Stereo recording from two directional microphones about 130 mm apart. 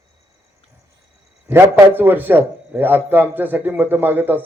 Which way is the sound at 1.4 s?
20° right (ahead or behind).